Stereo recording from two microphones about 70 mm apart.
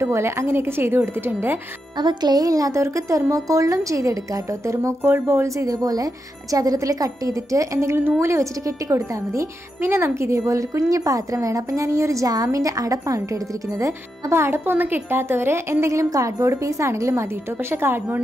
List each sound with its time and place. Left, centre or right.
0.0 s a woman's voice: right
2.0 s a woman's voice: right